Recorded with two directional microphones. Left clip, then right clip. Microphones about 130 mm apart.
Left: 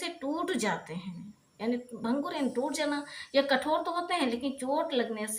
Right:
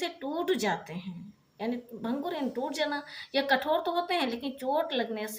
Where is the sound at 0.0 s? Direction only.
35° right (ahead or behind).